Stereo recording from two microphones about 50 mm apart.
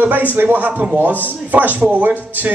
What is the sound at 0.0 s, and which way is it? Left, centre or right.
Speech, right.